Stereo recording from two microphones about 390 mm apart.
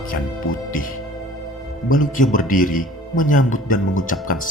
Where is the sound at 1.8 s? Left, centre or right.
Left.